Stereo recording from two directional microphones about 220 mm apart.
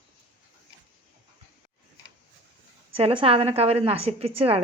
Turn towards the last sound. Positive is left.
turn(degrees=-25)  # may be behind; listen again after turning